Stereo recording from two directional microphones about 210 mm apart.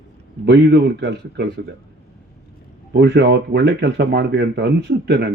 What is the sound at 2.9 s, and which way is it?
Speech, 55° right (ahead or behind).